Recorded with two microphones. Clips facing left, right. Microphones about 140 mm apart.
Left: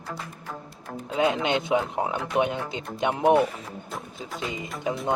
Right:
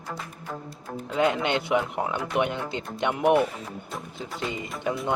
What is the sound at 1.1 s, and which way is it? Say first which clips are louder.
Speech: even; 15° left (ahead or behind).